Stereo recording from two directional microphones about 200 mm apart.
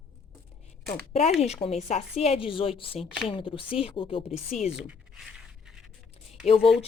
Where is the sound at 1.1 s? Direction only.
30° left (ahead or behind).